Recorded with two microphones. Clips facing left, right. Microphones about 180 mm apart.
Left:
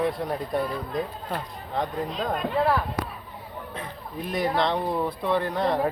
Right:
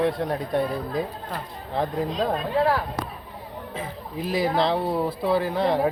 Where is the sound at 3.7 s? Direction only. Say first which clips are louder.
Right 4 dB; 5° right (ahead or behind).